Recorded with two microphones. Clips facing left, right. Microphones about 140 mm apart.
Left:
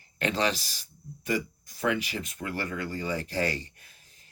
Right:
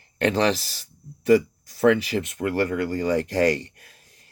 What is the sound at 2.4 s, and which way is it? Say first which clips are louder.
Speech: right 10 dB; 60° right (ahead or behind).